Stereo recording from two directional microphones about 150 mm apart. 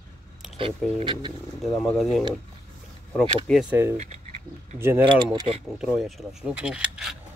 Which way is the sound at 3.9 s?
45° right (ahead or behind).